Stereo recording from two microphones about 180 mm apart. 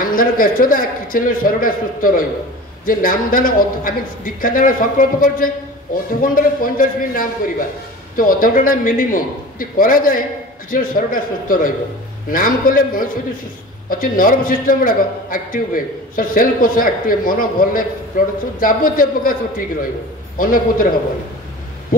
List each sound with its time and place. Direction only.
0.0 s a man's voice: 50° left (ahead or behind)
20.3 s a man's voice: 50° left (ahead or behind)